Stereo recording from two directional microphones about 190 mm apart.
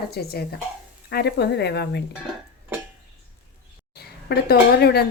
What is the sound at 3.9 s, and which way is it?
Speech, 55° left (ahead or behind).